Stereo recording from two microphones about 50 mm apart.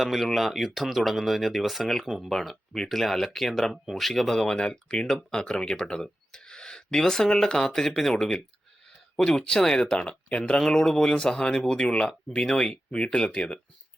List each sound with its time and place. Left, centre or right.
0.0 s speech: centre
2.3 s speech: centre
9.8 s speech: left
10.6 s speech: centre